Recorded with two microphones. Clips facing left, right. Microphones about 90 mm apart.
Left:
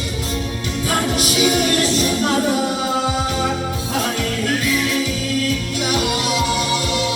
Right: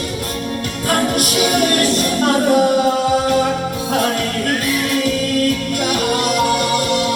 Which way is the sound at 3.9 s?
50° right (ahead or behind).